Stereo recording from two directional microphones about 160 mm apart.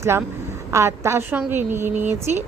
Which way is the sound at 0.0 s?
15° right (ahead or behind).